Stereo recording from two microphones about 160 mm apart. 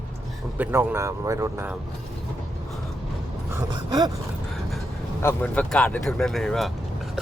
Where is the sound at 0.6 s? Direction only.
15° right (ahead or behind).